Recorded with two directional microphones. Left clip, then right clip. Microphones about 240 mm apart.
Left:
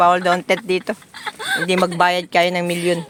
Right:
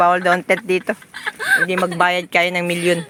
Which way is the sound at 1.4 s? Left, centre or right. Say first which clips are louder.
Right 6 dB; right.